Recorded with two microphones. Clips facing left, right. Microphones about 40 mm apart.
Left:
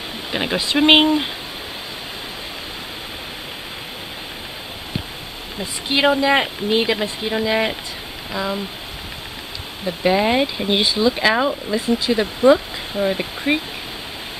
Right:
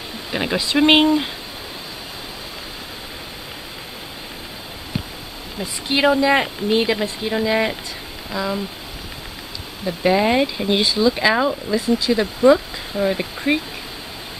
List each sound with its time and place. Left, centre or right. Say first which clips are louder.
0.3 s speech: even; centre
5.6 s speech: even; centre
9.8 s speech: even; centre
11.1 s speech: even; centre
12.5 s speech: even; centre